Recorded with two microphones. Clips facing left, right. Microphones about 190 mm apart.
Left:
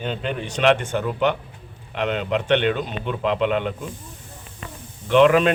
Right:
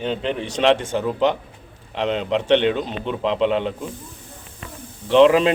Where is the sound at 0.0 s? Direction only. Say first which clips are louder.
Right 3 dB; 25° right (ahead or behind).